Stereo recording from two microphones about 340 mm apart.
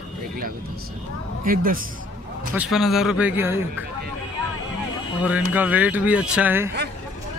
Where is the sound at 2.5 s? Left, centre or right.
Centre.